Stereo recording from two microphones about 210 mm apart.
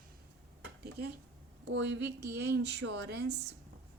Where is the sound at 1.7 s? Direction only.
55° right (ahead or behind).